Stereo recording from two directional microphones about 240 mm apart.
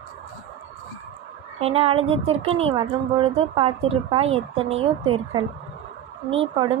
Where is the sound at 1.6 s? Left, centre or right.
Right.